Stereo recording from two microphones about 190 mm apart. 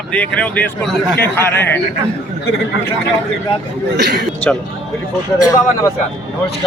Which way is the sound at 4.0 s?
60° right (ahead or behind).